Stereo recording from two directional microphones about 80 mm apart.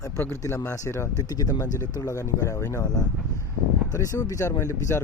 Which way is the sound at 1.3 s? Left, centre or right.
Left.